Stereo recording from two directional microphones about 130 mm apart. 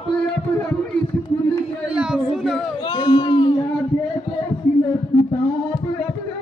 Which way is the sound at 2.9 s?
40° left (ahead or behind).